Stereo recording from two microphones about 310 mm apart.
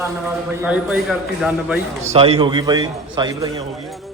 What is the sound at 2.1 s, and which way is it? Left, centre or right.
A man's voice, centre.